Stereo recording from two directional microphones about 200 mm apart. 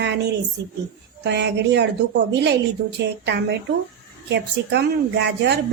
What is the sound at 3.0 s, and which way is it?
A woman's voice, 60° right (ahead or behind).